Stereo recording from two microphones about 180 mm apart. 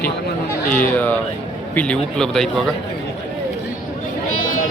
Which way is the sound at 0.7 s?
10° left (ahead or behind).